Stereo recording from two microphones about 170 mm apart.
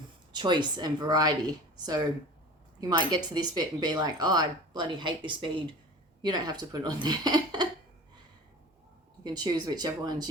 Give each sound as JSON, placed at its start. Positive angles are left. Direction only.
{"t": 0.3, "sound": "speech", "side_deg": -25}
{"t": 9.2, "sound": "speech", "side_deg": -25}